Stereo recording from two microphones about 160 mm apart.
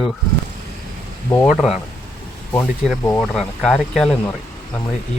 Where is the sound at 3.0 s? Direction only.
5° left (ahead or behind).